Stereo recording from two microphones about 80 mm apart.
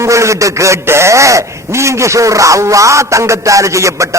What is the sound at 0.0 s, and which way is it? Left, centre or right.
A man's voice, right.